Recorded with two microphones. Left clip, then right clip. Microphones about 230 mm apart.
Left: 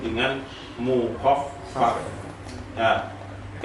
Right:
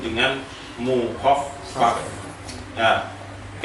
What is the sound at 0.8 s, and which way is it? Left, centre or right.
Speech, left.